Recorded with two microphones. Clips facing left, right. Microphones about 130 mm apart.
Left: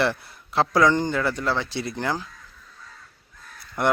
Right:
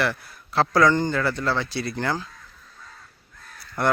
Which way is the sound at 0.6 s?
15° left (ahead or behind).